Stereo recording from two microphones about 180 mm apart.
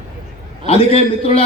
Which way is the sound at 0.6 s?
35° left (ahead or behind).